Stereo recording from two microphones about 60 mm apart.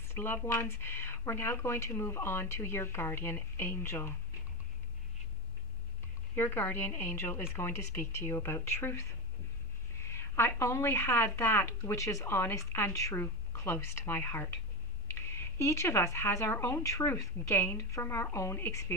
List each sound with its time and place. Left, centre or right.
0.1 s speech: left
6.3 s a woman's voice: left
10.0 s speech: left
12.0 s speech: left
16.8 s speech: left
17.6 s a woman's voice: left